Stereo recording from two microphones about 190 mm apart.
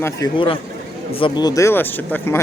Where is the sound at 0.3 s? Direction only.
25° left (ahead or behind).